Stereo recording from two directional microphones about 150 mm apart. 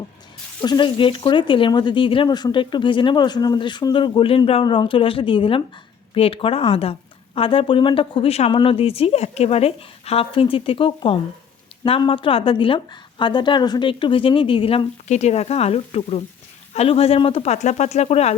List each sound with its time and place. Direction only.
0.6 s speech: 30° left (ahead or behind); by 18.3 s 45° left (ahead or behind)